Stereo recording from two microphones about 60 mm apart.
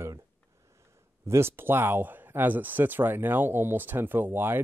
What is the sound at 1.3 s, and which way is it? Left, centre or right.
Speech, right.